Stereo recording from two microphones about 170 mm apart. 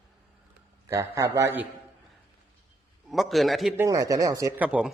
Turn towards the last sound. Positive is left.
turn(degrees=-5)  # may be behind; listen again after turning